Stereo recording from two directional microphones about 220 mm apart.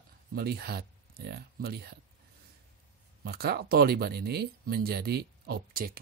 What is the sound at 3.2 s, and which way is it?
Speech, 45° right (ahead or behind).